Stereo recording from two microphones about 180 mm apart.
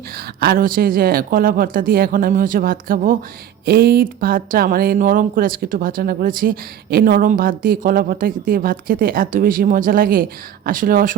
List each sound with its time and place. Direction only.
0.3 s speech: 60° right (ahead or behind)